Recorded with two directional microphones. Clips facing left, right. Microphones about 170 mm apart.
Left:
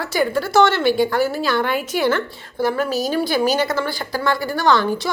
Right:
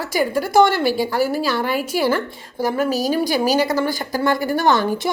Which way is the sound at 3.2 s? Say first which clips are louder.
Left 1 dB; 40° right (ahead or behind).